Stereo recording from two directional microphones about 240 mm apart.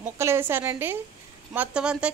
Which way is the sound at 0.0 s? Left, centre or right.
Centre.